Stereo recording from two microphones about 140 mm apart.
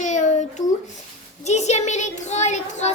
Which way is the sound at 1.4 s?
55° left (ahead or behind).